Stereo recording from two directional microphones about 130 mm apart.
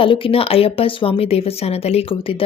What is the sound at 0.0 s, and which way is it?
A woman's voice, 45° left (ahead or behind).